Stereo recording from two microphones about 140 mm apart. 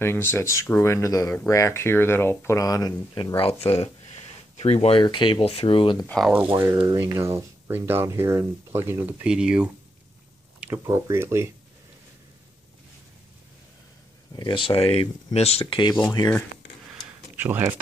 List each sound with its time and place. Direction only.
0.0 s speech: 15° left (ahead or behind)
3.3 s speech: 45° left (ahead or behind)
6.0 s speech: 5° left (ahead or behind)
6.3 s speech: 15° right (ahead or behind)
10.8 s speech: 20° right (ahead or behind)
14.3 s speech: 35° left (ahead or behind)
15.6 s speech: 30° left (ahead or behind)
17.4 s speech: 15° right (ahead or behind)